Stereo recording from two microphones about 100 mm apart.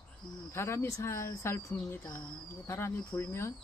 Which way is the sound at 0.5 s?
25° left (ahead or behind).